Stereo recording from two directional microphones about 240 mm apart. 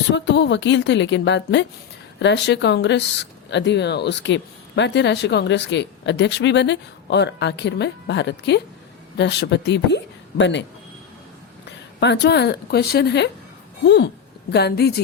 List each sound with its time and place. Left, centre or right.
0.1 s speech: left
11.9 s a woman's voice: left